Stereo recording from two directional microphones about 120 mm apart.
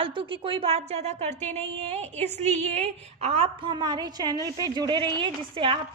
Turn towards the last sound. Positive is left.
turn(degrees=-45)  # may be behind; listen again after turning